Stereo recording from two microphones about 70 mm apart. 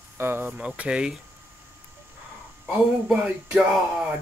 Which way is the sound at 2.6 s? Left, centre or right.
Centre.